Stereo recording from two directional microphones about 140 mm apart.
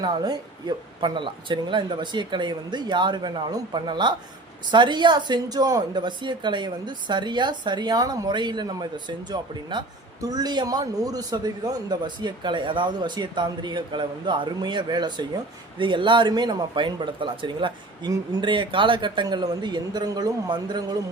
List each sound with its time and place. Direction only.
0.0 s speech: 30° right (ahead or behind)